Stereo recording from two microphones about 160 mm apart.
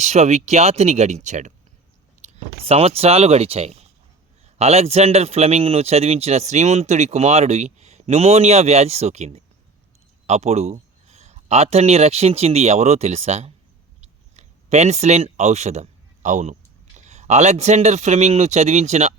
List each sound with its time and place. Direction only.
0.0 s a man's voice: 45° right (ahead or behind)
14.0 s clicking: 45° right (ahead or behind)
17.1 s a man's voice: 45° right (ahead or behind)